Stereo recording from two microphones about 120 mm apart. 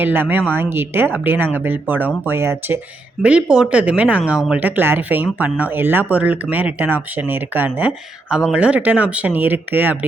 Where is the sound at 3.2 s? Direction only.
10° right (ahead or behind).